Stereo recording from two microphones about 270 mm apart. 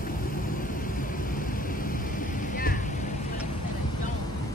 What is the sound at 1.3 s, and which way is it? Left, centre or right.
Vehicle, left.